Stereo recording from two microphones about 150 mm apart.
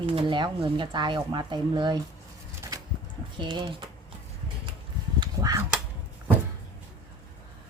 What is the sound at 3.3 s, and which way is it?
Speech, 30° right (ahead or behind).